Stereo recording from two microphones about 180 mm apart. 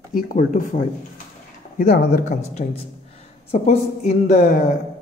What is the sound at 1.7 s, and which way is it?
Speech, 50° left (ahead or behind).